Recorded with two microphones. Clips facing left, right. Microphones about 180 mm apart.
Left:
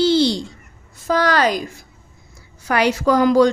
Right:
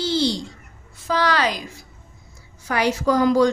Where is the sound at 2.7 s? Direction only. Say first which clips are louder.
Left 3 dB; 75° left (ahead or behind).